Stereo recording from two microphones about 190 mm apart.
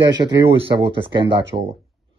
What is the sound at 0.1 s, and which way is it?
A man's voice, 25° right (ahead or behind).